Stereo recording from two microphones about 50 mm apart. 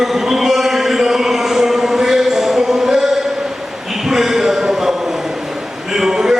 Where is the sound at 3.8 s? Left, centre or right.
Centre.